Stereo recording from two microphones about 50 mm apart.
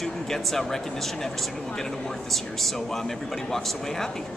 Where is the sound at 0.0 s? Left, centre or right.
Centre.